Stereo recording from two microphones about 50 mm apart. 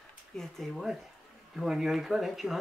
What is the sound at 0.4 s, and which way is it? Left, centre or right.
Speech, centre.